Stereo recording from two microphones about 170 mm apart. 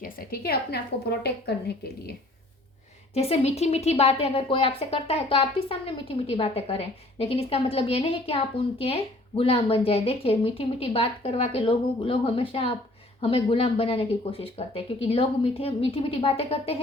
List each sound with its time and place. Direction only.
0.0 s a woman's voice: 65° left (ahead or behind)
3.2 s a woman's voice: 35° left (ahead or behind)